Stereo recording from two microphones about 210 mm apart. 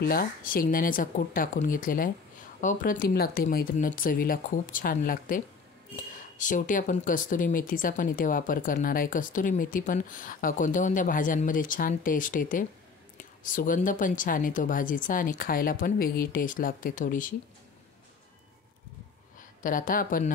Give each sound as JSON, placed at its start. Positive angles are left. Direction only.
{"t": 0.0, "sound": "speech", "side_deg": 45}
{"t": 19.6, "sound": "speech", "side_deg": 40}